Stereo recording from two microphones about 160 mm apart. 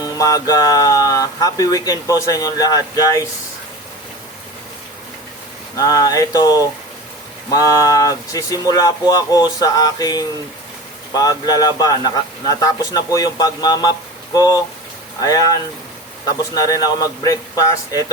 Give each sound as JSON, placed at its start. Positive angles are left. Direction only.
{"t": 0.0, "sound": "speech", "side_deg": 20}
{"t": 5.7, "sound": "speech", "side_deg": 20}
{"t": 16.6, "sound": "speech", "side_deg": 25}